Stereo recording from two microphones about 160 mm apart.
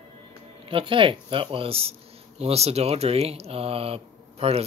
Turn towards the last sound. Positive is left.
turn(degrees=-40)  # may be behind; listen again after turning